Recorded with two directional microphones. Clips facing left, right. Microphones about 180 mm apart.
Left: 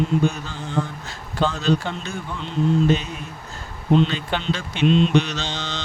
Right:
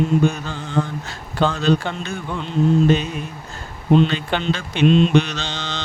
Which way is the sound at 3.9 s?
60° right (ahead or behind).